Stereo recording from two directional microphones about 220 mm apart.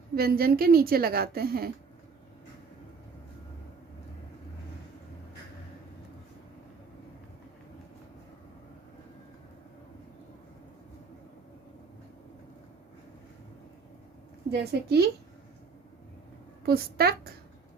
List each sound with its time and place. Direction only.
0.2 s a woman's voice: 45° right (ahead or behind)
14.5 s a woman's voice: 45° right (ahead or behind)
16.6 s a woman's voice: 45° right (ahead or behind)